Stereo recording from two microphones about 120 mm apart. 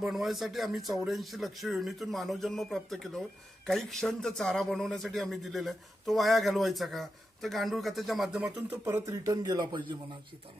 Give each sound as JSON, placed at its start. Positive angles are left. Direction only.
{"t": 0.0, "sound": "speech", "side_deg": 0}
{"t": 9.0, "sound": "a man's voice", "side_deg": -30}